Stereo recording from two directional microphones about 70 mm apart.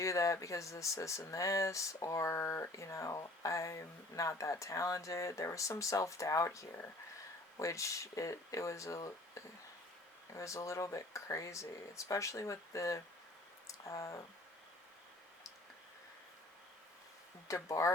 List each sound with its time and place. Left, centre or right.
0.0 s speech: left
17.5 s speech: left